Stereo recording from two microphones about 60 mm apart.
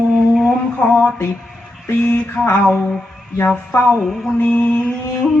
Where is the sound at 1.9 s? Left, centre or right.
Left.